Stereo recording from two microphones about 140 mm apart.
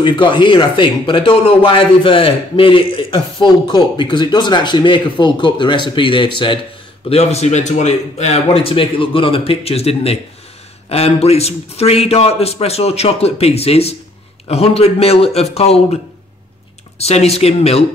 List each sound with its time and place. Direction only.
0.0 s a man's voice: 35° left (ahead or behind)
7.1 s a man's voice: 50° left (ahead or behind)
17.0 s a man's voice: 50° left (ahead or behind)